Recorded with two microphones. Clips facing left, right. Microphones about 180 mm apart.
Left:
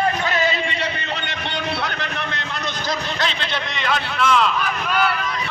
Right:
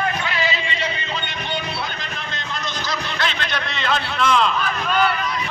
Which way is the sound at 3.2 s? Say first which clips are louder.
Even; 35° left (ahead or behind).